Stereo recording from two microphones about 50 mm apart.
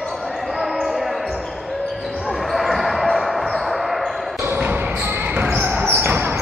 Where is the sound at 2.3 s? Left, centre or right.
Centre.